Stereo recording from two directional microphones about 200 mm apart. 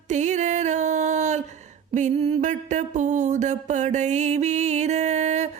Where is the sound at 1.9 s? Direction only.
35° right (ahead or behind).